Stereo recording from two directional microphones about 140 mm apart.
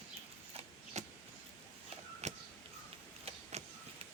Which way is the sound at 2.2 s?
55° right (ahead or behind).